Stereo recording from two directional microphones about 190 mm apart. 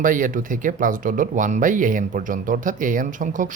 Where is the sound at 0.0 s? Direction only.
45° right (ahead or behind).